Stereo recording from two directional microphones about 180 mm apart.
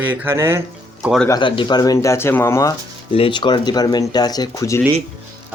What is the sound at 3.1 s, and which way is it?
Speech, 30° left (ahead or behind).